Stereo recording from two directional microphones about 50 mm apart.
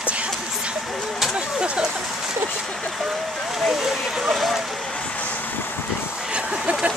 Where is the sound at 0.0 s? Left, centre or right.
Right.